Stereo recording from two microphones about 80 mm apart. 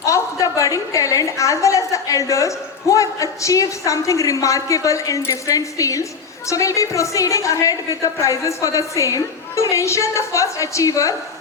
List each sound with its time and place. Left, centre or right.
0.0 s a woman's voice: left